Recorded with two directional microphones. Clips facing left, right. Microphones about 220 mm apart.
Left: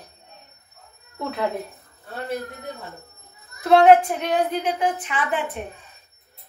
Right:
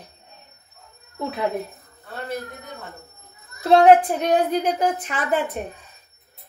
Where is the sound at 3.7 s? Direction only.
40° right (ahead or behind).